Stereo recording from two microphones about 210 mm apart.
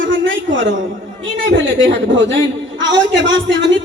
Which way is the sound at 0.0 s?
65° right (ahead or behind).